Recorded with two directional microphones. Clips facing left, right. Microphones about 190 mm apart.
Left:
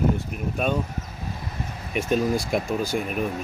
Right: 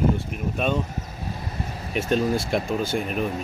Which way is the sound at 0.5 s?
5° left (ahead or behind).